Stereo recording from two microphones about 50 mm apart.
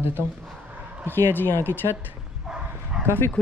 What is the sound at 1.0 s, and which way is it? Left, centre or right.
Speech, left.